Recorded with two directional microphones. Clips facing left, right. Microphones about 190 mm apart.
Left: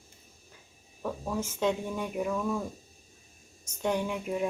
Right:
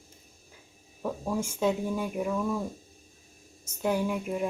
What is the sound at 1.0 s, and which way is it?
Speech, 10° right (ahead or behind).